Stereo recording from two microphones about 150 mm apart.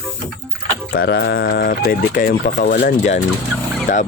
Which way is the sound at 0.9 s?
90° left.